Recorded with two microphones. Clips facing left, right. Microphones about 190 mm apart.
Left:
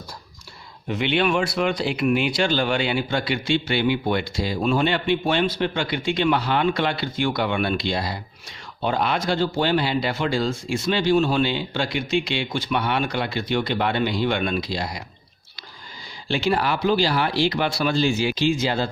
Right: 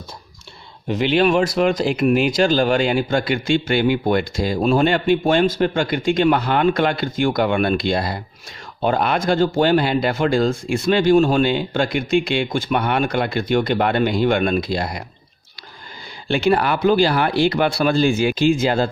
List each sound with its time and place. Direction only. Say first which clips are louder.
0.9 s speech: right 5 dB; 40° right (ahead or behind); by 15.0 s 55° right (ahead or behind)
16.3 s speech: right 5 dB; 55° right (ahead or behind)